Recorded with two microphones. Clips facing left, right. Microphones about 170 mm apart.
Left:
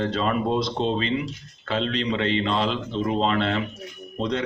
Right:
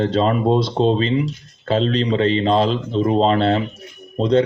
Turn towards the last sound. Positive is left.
turn(degrees=-30)  # may be behind; listen again after turning